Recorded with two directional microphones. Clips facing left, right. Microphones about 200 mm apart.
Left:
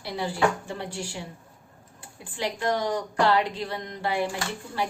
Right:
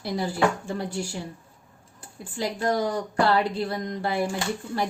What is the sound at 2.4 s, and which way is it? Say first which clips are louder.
A woman's voice: right 2 dB; 40° right (ahead or behind).